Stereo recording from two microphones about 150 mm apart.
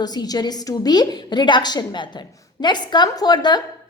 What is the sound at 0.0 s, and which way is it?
A woman's voice, 25° left (ahead or behind).